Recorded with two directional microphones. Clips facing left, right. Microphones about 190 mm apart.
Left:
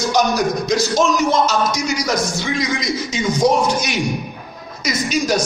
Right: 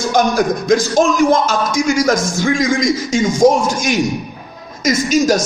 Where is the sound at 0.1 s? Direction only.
50° right (ahead or behind).